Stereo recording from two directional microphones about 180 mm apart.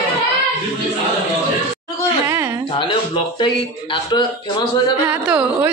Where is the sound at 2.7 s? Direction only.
25° left (ahead or behind).